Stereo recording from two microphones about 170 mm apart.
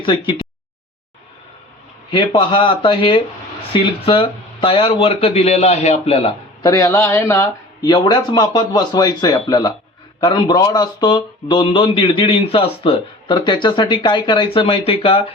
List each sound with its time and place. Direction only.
0.0 s speech: 30° left (ahead or behind)
2.0 s speech: 30° left (ahead or behind)
6.6 s speech: 20° left (ahead or behind)